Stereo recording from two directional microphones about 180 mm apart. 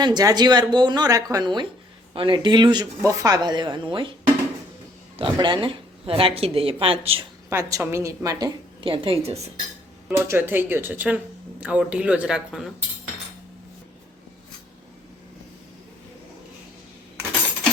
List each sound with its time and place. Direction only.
0.0 s speech: 20° right (ahead or behind)
5.2 s speech: 25° right (ahead or behind)
7.5 s speech: 15° right (ahead or behind)
8.8 s speech: 30° right (ahead or behind)
10.1 s speech: 15° right (ahead or behind)